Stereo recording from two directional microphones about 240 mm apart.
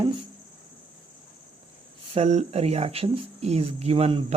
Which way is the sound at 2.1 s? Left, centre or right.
Right.